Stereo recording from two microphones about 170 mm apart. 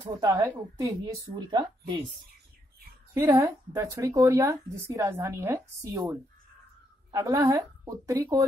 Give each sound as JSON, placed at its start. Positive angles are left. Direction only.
{"t": 0.2, "sound": "a woman's voice", "side_deg": -20}
{"t": 3.2, "sound": "a woman's voice", "side_deg": -15}